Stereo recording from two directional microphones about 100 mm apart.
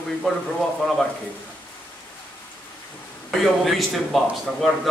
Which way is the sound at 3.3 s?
Centre (ahead or behind).